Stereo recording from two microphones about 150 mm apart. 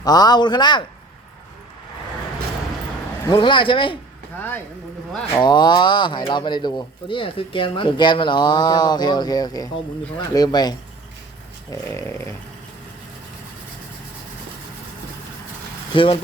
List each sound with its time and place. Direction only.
0.0 s speech: 25° left (ahead or behind)
3.3 s speech: 30° left (ahead or behind)
4.4 s snoring: 10° left (ahead or behind)
5.3 s speech: 30° left (ahead or behind)
11.7 s snoring: 20° left (ahead or behind)
15.9 s speech: 35° left (ahead or behind)